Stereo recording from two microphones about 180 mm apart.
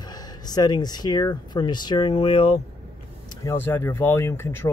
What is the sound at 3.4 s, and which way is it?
Speech, 15° left (ahead or behind).